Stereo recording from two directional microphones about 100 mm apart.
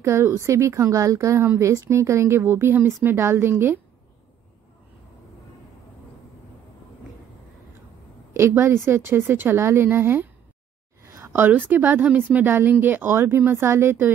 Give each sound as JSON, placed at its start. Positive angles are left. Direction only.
{"t": 0.0, "sound": "speech", "side_deg": -30}
{"t": 8.3, "sound": "speech", "side_deg": -30}
{"t": 11.2, "sound": "speech", "side_deg": -20}